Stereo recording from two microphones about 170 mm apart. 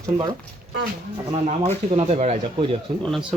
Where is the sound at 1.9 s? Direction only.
35° right (ahead or behind).